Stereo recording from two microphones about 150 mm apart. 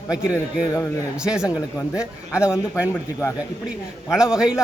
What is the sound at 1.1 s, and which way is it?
A man's voice, 5° right (ahead or behind).